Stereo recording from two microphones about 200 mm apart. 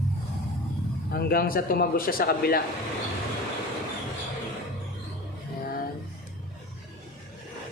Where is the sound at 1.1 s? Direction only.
50° left (ahead or behind).